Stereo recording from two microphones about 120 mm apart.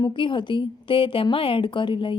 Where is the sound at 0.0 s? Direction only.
45° left (ahead or behind).